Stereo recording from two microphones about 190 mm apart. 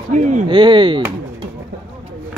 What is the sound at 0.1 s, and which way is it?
Speech, 40° right (ahead or behind).